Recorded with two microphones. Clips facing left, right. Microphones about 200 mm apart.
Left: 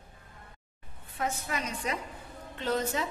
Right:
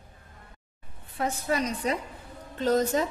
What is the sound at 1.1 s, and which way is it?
A woman's voice, 35° right (ahead or behind).